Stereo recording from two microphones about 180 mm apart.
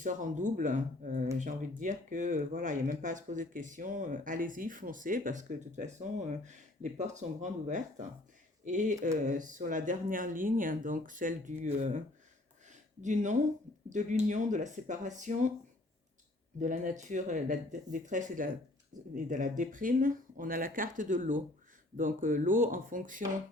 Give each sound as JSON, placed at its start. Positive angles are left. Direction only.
{"t": 0.0, "sound": "speech", "side_deg": -45}
{"t": 12.6, "sound": "a sound", "side_deg": -40}
{"t": 13.9, "sound": "speech", "side_deg": -45}
{"t": 16.6, "sound": "speech", "side_deg": -45}